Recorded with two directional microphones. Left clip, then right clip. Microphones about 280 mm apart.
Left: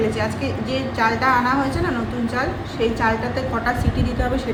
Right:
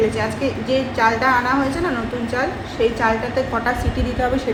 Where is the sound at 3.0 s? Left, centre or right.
Centre.